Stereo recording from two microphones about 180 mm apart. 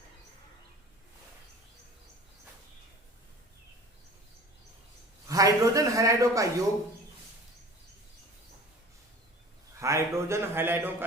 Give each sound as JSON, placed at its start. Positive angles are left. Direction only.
{"t": 5.3, "sound": "a man's voice", "side_deg": -20}
{"t": 9.8, "sound": "a man's voice", "side_deg": -15}